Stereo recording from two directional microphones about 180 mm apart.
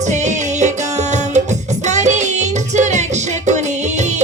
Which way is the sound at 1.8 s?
40° right (ahead or behind).